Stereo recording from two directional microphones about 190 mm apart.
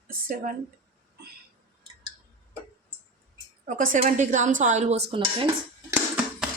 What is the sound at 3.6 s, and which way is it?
Speech, 45° right (ahead or behind).